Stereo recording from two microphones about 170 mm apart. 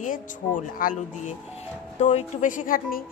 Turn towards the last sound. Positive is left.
turn(degrees=55)  # may be behind; listen again after turning